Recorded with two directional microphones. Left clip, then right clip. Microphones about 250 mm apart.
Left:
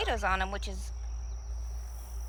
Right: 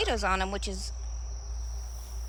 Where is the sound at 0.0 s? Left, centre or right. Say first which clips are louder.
Right 2 dB; centre.